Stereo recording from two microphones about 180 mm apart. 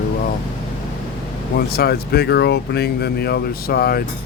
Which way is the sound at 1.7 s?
60° left (ahead or behind).